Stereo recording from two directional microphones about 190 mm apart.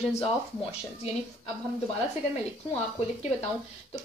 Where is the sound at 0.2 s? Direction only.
30° left (ahead or behind).